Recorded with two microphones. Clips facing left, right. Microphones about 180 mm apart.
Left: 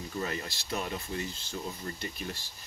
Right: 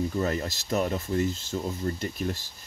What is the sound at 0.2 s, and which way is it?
Speech, 40° right (ahead or behind).